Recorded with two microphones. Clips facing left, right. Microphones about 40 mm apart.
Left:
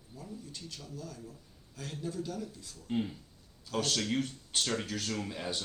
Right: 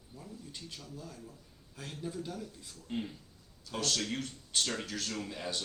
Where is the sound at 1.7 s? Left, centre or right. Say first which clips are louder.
Left 2 dB; centre.